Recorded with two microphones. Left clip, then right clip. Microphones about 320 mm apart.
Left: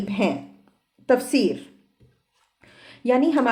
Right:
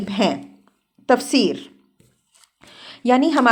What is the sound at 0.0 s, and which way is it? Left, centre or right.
Speech, right.